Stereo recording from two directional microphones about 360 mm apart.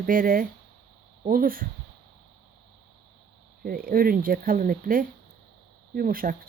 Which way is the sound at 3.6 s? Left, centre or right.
Right.